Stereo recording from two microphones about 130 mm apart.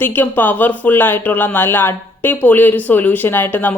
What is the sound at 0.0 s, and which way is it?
A woman's voice, 15° left (ahead or behind).